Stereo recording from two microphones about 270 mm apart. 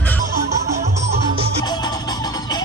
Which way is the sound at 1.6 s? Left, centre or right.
Centre.